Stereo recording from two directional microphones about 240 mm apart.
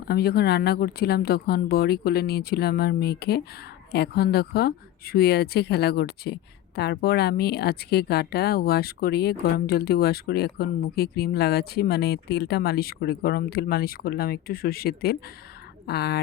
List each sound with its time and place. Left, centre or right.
0.1 s speech: left